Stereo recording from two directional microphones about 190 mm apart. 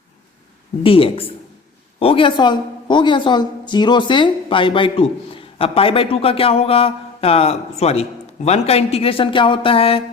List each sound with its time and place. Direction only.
0.8 s a woman's voice: 30° left (ahead or behind)